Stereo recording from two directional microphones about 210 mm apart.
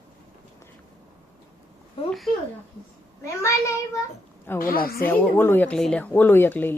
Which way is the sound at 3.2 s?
15° left (ahead or behind).